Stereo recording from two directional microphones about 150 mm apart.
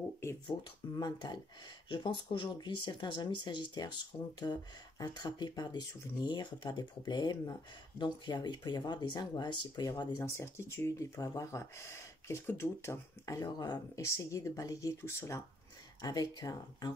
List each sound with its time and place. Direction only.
0.5 s speech: 30° left (ahead or behind)